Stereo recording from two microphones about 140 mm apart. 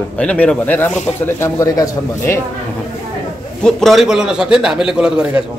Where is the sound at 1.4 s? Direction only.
25° left (ahead or behind).